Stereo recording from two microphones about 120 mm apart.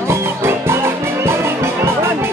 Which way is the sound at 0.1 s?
20° right (ahead or behind).